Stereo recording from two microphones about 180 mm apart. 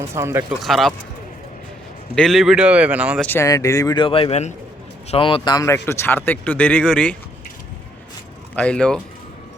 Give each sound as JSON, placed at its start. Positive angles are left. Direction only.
{"t": 0.1, "sound": "speech", "side_deg": -15}
{"t": 0.6, "sound": "speech", "side_deg": 0}
{"t": 2.1, "sound": "speech", "side_deg": 0}
{"t": 3.2, "sound": "speech", "side_deg": 10}
{"t": 8.5, "sound": "speech", "side_deg": 5}